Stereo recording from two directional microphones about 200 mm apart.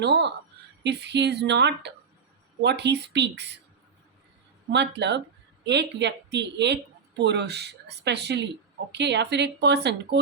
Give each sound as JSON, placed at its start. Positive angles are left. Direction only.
{"t": 0.0, "sound": "speech", "side_deg": -60}
{"t": 4.7, "sound": "speech", "side_deg": -60}